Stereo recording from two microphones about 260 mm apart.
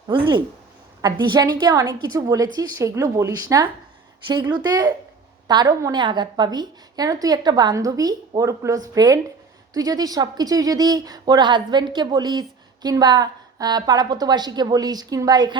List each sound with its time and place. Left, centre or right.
0.1 s a woman's voice: centre